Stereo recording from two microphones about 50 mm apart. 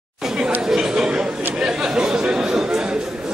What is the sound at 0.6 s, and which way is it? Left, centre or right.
Chatter, centre.